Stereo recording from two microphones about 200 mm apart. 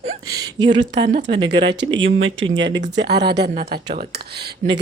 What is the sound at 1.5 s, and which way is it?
Speech, 60° right (ahead or behind).